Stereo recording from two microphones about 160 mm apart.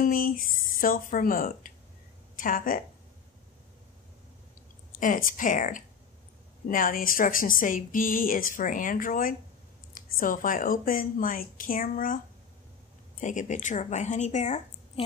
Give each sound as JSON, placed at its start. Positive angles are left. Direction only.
{"t": 0.0, "sound": "speech", "side_deg": 60}
{"t": 5.0, "sound": "speech", "side_deg": 60}
{"t": 13.2, "sound": "a woman's voice", "side_deg": 50}